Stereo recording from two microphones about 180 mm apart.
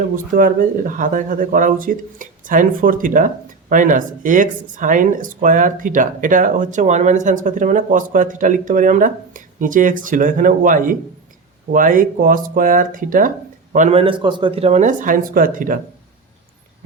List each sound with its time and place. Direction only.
0.3 s speech: 50° right (ahead or behind)
13.7 s speech: 35° right (ahead or behind)